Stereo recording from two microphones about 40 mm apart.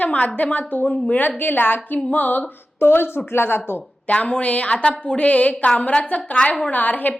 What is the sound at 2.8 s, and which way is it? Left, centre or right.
Speech, left.